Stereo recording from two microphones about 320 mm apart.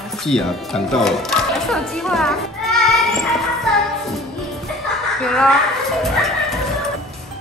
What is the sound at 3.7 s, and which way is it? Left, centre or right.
Music, centre.